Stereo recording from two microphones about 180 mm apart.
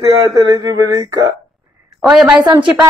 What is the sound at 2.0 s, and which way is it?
Speech, centre (ahead or behind).